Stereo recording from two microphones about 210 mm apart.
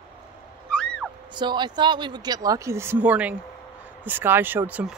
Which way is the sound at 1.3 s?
20° right (ahead or behind).